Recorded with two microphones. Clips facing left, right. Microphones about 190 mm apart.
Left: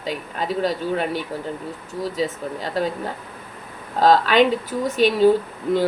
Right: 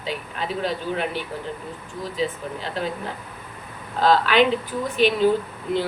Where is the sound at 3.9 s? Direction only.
40° left (ahead or behind).